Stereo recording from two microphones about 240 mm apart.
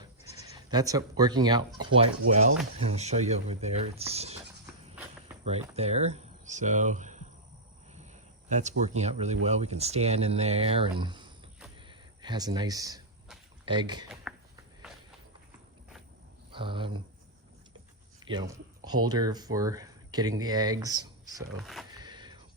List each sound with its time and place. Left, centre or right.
0.5 s speech: centre
2.9 s speech: right
5.5 s speech: right
8.0 s a sound: right
9.0 s speech: right
11.8 s a sound: centre
13.7 s speech: centre
16.5 s speech: right
18.3 s a sound: centre
19.0 s speech: centre
21.6 s speech: centre
21.9 s a sound: centre